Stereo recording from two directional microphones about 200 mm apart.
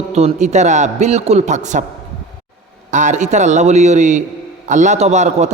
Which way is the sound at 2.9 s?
35° right (ahead or behind).